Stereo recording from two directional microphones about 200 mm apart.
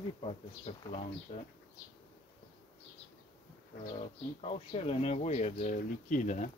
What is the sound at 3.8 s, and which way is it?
Speech, 25° left (ahead or behind).